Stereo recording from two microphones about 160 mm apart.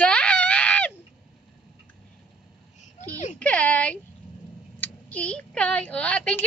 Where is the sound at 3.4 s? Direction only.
10° left (ahead or behind).